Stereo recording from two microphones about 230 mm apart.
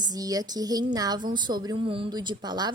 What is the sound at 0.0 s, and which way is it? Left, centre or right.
A woman's voice, centre.